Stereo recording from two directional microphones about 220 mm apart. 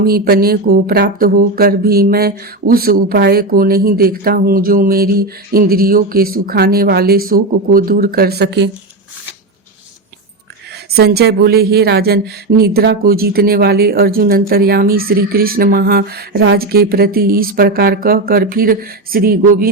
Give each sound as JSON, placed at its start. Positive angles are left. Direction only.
{"t": 0.0, "sound": "speech", "side_deg": -45}
{"t": 10.9, "sound": "speech", "side_deg": -45}